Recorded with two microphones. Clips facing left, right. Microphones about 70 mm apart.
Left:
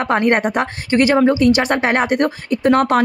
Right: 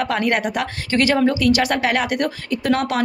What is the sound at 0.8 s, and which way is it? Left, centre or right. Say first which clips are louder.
Speech: left 4 dB; left.